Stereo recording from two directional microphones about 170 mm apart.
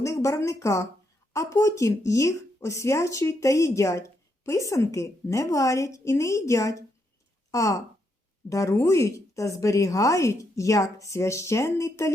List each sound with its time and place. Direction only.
0.0 s a woman's voice: 20° left (ahead or behind)